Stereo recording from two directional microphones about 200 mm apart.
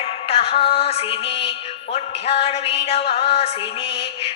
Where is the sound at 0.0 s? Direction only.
30° left (ahead or behind).